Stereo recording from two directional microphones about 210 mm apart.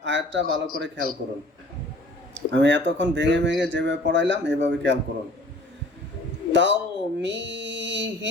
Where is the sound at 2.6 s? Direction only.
55° right (ahead or behind).